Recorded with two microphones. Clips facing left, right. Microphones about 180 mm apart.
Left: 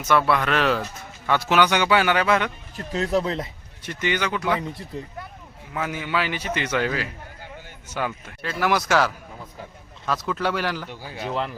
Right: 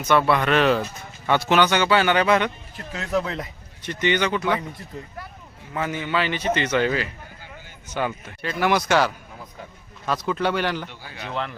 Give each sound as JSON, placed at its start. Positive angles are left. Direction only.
{"t": 0.0, "sound": "a man's voice", "side_deg": 0}
{"t": 2.7, "sound": "speech", "side_deg": 35}
{"t": 3.8, "sound": "a man's voice", "side_deg": 5}
{"t": 5.7, "sound": "a man's voice", "side_deg": 5}